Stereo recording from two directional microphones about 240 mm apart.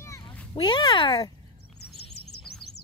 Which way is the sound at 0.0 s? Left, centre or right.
Centre.